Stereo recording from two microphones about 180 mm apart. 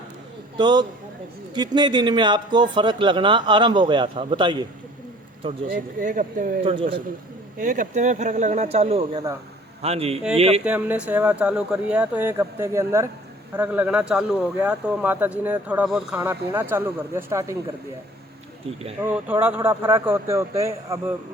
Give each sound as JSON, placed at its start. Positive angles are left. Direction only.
{"t": 0.5, "sound": "speech", "side_deg": -25}
{"t": 5.6, "sound": "speech", "side_deg": -50}
{"t": 7.6, "sound": "speech", "side_deg": -45}
{"t": 10.6, "sound": "speech", "side_deg": -10}
{"t": 19.0, "sound": "speech", "side_deg": -10}